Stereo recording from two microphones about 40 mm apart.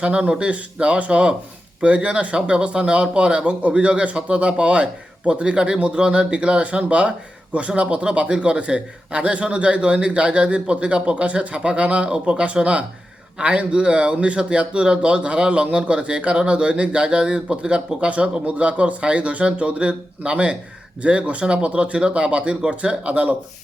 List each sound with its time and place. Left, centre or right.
0.0 s a man's voice: right